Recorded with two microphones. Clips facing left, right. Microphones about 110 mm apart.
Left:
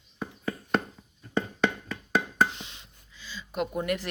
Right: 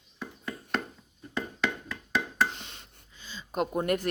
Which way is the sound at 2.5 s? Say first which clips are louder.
Even; 50° right (ahead or behind).